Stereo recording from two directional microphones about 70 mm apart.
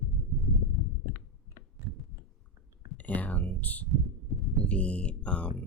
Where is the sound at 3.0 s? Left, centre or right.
Left.